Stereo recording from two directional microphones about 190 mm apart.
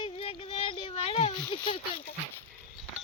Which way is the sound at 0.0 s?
30° left (ahead or behind).